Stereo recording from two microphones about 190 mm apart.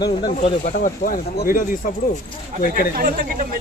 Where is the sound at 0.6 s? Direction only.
45° left (ahead or behind).